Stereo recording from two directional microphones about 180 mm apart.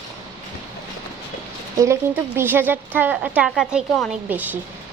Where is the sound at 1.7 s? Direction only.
15° right (ahead or behind).